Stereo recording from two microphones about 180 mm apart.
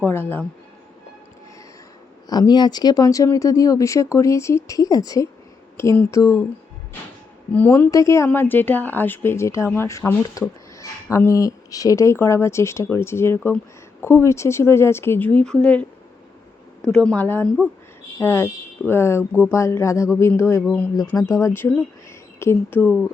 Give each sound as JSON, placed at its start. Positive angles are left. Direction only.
{"t": 0.0, "sound": "a woman's voice", "side_deg": 10}
{"t": 2.2, "sound": "a woman's voice", "side_deg": 20}
{"t": 7.5, "sound": "a woman's voice", "side_deg": 10}